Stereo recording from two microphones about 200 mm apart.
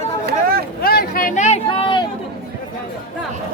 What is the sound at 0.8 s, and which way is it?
Vehicle, 50° left (ahead or behind).